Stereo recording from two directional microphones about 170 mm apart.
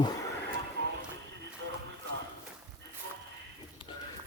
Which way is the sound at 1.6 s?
90° right.